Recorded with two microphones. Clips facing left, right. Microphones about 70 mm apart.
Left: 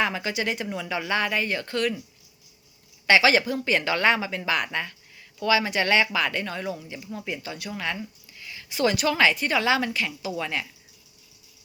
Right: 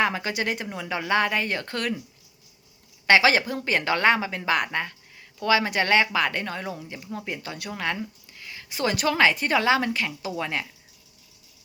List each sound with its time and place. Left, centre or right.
0.0 s speech: right
3.1 s speech: right